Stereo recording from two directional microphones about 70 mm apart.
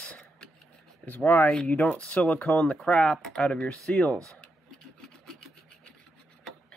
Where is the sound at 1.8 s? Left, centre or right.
Centre.